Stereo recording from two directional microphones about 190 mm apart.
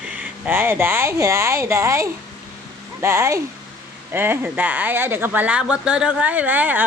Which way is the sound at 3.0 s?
15° right (ahead or behind).